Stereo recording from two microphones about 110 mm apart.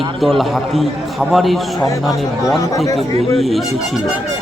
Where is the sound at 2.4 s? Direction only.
30° left (ahead or behind).